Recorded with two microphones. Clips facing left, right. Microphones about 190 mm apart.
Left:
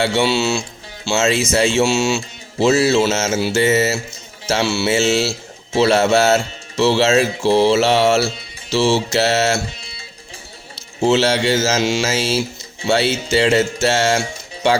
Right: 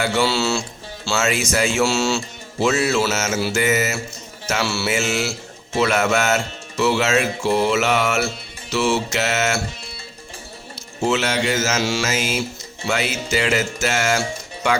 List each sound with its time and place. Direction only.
0.0 s speech: 25° left (ahead or behind)
8.7 s mantra: 30° left (ahead or behind)
11.0 s speech: 30° left (ahead or behind)